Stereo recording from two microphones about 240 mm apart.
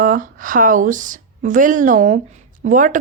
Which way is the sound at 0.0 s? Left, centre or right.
Right.